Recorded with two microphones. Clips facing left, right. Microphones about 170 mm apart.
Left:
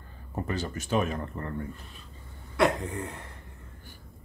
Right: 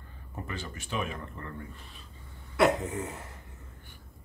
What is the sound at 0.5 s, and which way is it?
Speech, 40° left (ahead or behind).